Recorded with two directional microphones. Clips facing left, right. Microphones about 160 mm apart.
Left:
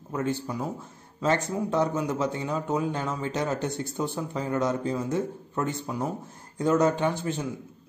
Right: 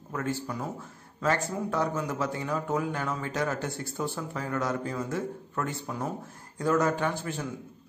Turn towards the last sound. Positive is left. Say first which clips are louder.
# left 3 dB
turn(degrees=20)  # may be behind; listen again after turning